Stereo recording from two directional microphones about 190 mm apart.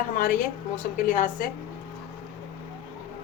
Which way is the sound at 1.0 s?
45° left (ahead or behind).